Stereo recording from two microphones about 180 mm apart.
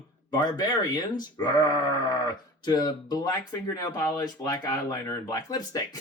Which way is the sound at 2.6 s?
25° left (ahead or behind).